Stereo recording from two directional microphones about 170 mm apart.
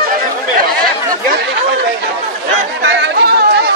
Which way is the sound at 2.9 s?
80° right.